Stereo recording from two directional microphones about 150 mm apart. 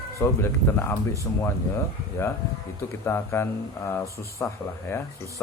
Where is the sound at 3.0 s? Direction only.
15° left (ahead or behind).